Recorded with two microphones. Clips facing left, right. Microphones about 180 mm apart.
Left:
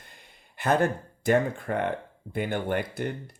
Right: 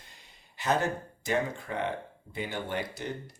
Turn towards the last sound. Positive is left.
turn(degrees=55)  # may be behind; listen again after turning